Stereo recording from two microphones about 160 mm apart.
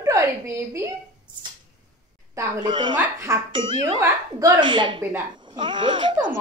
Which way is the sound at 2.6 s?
30° right (ahead or behind).